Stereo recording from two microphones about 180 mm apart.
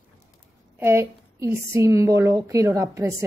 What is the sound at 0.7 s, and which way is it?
A woman's voice, 10° right (ahead or behind).